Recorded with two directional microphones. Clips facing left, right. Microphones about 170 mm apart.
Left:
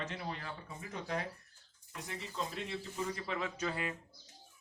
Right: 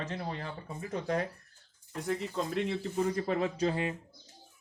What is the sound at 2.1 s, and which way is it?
Speech, 60° right (ahead or behind).